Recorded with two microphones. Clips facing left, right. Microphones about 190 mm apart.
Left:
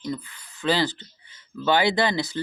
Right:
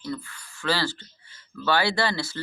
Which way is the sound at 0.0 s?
20° left (ahead or behind).